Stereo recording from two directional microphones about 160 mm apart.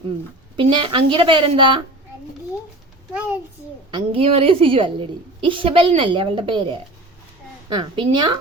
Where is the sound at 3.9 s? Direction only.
35° right (ahead or behind).